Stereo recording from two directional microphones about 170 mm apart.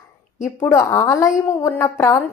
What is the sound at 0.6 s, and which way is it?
A woman's voice, 15° left (ahead or behind).